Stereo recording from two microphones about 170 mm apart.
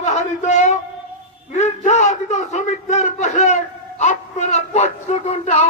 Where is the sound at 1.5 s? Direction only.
45° left (ahead or behind).